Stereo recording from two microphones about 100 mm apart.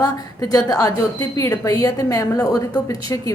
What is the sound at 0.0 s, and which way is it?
A woman's voice, 35° left (ahead or behind).